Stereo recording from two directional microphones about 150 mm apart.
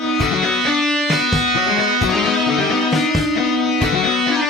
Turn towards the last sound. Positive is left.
turn(degrees=0)  # may be behind; listen again after turning